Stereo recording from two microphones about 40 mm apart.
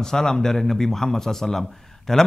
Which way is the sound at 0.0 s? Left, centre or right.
Centre.